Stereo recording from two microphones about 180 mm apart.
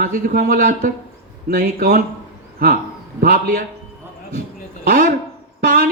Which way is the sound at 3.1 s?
55° right (ahead or behind).